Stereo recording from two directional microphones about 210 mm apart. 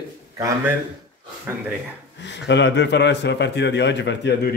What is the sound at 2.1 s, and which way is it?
Speech, 55° left (ahead or behind).